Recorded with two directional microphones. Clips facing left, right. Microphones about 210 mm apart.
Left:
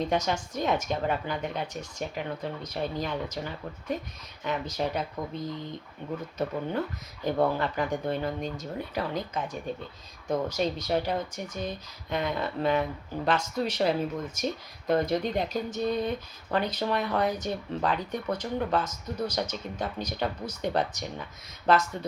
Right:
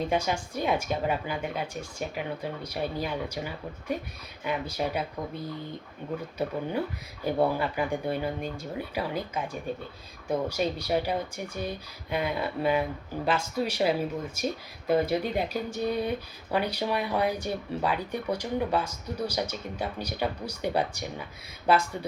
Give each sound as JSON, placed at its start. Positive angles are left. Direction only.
{"t": 0.1, "sound": "speech", "side_deg": -10}
{"t": 7.3, "sound": "speech", "side_deg": -10}